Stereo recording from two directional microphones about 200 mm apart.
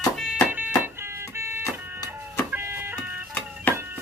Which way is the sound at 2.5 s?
10° right (ahead or behind).